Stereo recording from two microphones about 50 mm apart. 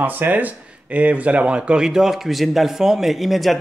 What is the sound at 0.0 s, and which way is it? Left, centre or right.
Speech, right.